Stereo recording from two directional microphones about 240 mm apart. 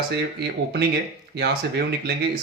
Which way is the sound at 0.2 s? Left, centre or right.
Right.